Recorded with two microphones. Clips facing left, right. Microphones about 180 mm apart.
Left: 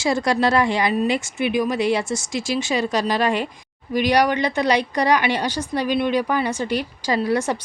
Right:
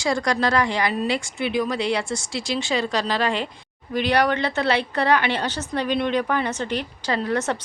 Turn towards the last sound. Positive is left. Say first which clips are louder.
# left 3 dB
turn(degrees=10)  # may be behind; listen again after turning